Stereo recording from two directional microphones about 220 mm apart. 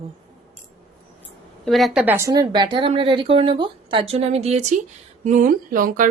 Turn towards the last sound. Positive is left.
turn(degrees=-35)  # may be behind; listen again after turning